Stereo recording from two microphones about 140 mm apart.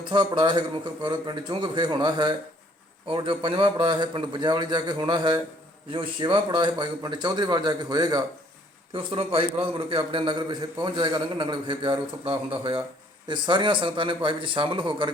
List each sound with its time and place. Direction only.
0.0 s a man's voice: 35° right (ahead or behind)